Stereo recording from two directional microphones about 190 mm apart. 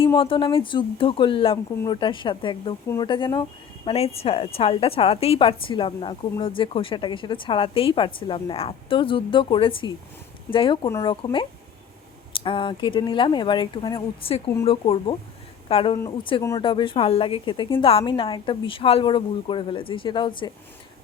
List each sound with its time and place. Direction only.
0.0 s a woman's voice: 30° left (ahead or behind)
10.8 s speech: 15° left (ahead or behind)
11.1 s a woman's voice: 25° left (ahead or behind)
16.4 s speech: 15° left (ahead or behind)
16.6 s a woman's voice: 25° left (ahead or behind)